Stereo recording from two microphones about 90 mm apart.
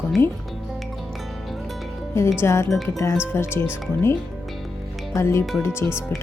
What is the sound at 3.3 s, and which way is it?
Speech, 25° left (ahead or behind).